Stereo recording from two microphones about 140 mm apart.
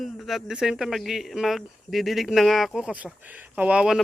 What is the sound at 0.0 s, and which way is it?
Speech, centre (ahead or behind).